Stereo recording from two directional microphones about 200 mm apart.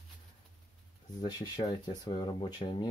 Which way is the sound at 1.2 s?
20° left (ahead or behind).